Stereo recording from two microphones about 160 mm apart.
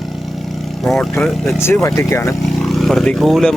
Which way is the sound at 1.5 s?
15° left (ahead or behind).